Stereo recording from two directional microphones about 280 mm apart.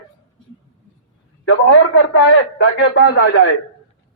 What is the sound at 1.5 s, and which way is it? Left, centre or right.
A man's voice, left.